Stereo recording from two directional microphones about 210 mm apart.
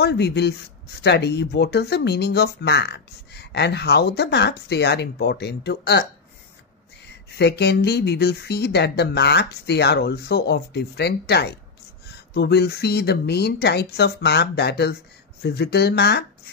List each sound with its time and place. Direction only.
0.0 s speech: 55° left (ahead or behind)
7.2 s speech: 50° left (ahead or behind)